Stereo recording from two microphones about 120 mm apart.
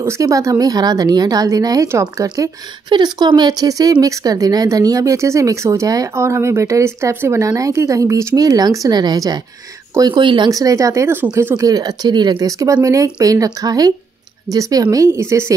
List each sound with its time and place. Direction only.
0.0 s speech: 25° right (ahead or behind)
2.9 s speech: 40° right (ahead or behind); by 15.5 s 25° right (ahead or behind)